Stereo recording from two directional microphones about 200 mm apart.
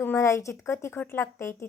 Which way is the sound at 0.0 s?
10° left (ahead or behind).